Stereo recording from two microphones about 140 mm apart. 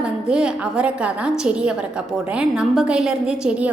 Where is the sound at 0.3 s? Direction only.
5° right (ahead or behind).